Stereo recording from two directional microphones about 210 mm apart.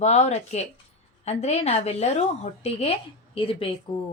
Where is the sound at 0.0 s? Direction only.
30° left (ahead or behind).